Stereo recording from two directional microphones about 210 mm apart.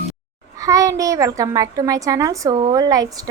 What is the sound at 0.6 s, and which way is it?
A woman's voice, 15° right (ahead or behind).